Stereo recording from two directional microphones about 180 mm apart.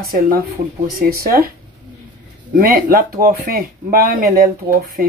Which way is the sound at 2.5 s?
55° right (ahead or behind).